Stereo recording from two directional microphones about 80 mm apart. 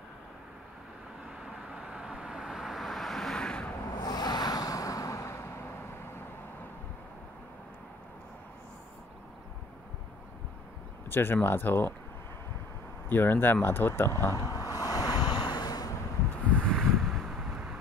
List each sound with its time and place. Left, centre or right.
1.4 s vehicle: centre
3.9 s a sound: left
11.1 s speech: left
13.1 s speech: left
14.3 s speech: left
14.8 s waves: left
16.4 s wind: centre